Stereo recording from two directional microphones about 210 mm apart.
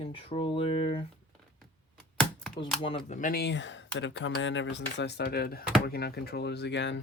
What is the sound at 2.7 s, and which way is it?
Speech, 30° left (ahead or behind).